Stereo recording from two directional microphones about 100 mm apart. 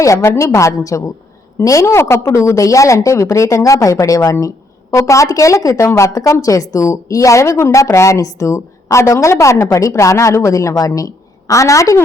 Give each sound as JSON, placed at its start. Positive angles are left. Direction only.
{"t": 0.0, "sound": "a woman's voice", "side_deg": 30}